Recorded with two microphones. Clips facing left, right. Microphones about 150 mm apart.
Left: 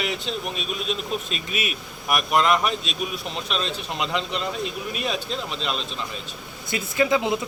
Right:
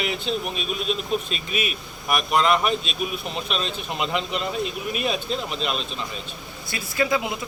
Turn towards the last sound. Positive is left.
turn(degrees=25)  # may be behind; listen again after turning